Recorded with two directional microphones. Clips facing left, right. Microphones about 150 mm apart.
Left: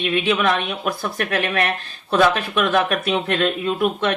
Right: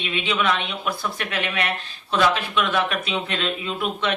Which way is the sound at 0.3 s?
50° left (ahead or behind).